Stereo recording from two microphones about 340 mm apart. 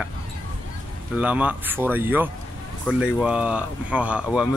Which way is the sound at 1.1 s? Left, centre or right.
Centre.